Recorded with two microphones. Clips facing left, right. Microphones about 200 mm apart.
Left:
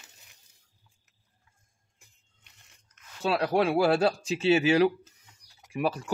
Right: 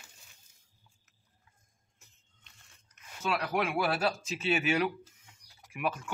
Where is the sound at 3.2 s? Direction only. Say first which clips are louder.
Left 6 dB; 35° left (ahead or behind).